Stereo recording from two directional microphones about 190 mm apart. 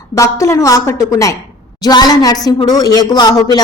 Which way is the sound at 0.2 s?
15° left (ahead or behind).